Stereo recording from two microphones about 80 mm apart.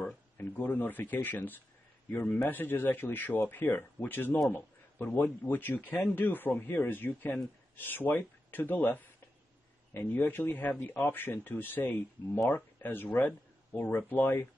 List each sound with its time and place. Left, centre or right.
0.4 s speech: left